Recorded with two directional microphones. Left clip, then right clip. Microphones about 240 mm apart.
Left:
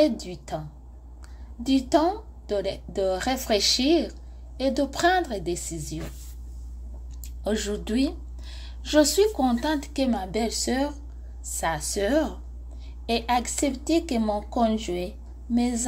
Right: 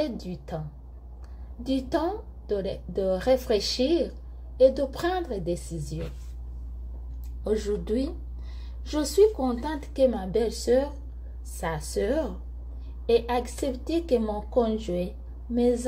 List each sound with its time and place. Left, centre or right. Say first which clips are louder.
0.0 s a woman's voice: left 8 dB; centre
1.7 s a woman's voice: left 5 dB; centre
7.4 s a woman's voice: right 1 dB; centre